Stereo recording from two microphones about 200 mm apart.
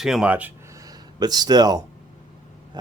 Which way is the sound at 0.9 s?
20° right (ahead or behind).